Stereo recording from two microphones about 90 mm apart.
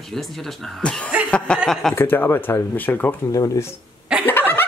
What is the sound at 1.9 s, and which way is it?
Speech, 25° left (ahead or behind).